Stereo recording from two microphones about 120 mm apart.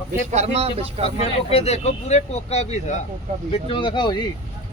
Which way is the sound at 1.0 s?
60° left (ahead or behind).